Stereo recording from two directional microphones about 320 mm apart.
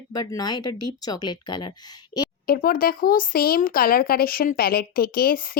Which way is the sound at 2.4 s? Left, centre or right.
Left.